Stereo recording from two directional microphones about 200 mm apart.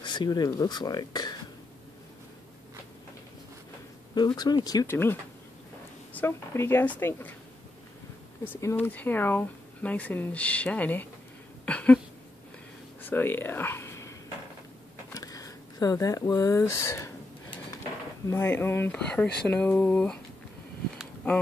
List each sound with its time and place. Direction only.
0.0 s speech: 20° left (ahead or behind)
4.1 s speech: 20° left (ahead or behind)
6.1 s speech: 10° left (ahead or behind)
8.5 s speech: 10° left (ahead or behind)
11.6 s a sound: 5° left (ahead or behind)
13.0 s a sound: 10° left (ahead or behind)
15.1 s speech: 15° left (ahead or behind)
18.2 s speech: 15° left (ahead or behind)